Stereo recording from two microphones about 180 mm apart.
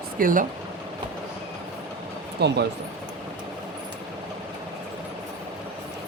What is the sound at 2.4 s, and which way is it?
Speech, 65° right (ahead or behind).